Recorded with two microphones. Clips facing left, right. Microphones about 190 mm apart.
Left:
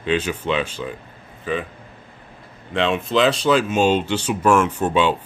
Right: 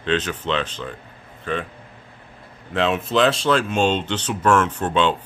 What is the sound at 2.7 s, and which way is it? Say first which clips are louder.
Speech: even; centre (ahead or behind).